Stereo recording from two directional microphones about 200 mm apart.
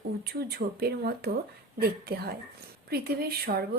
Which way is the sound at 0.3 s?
50° right (ahead or behind).